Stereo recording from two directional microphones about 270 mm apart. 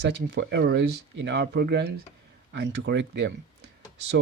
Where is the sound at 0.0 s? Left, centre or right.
Right.